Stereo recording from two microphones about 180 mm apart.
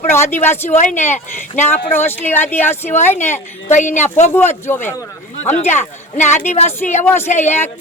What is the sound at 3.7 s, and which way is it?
Speech, 40° left (ahead or behind).